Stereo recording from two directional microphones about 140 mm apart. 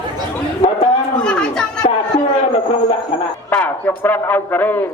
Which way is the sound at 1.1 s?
5° left (ahead or behind).